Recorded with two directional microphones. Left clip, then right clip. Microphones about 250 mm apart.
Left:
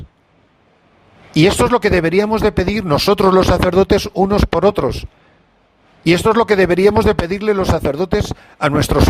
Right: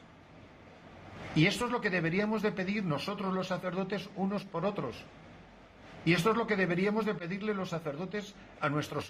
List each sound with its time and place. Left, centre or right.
1.3 s speech: left
6.1 s speech: left